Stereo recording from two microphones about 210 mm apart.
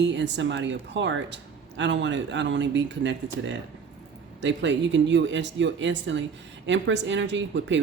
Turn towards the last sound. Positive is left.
turn(degrees=-60)  # may be behind; listen again after turning